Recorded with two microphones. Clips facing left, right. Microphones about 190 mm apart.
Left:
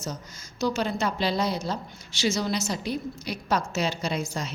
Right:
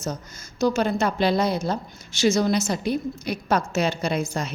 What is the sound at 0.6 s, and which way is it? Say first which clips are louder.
A woman's voice: right 5 dB; 50° right (ahead or behind).